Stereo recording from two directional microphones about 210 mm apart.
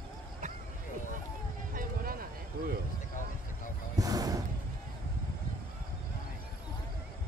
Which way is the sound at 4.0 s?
15° right (ahead or behind).